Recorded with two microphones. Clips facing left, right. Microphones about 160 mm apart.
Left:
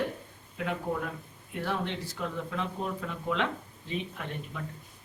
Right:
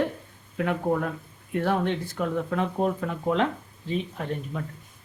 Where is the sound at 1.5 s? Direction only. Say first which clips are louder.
Right 8 dB; 55° right (ahead or behind); by 4.6 s 40° right (ahead or behind).